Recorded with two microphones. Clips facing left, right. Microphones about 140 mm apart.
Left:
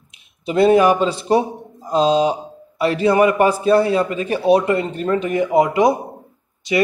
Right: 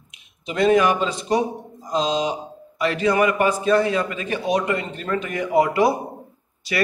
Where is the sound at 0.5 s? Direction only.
35° left (ahead or behind).